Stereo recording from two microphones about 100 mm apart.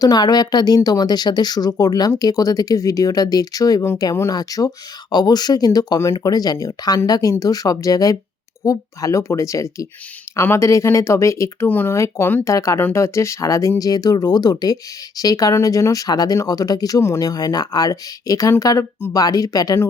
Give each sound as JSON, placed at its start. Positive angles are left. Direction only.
{"t": 0.0, "sound": "speech", "side_deg": 40}